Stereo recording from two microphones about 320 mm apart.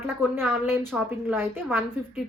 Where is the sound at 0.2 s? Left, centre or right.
Centre.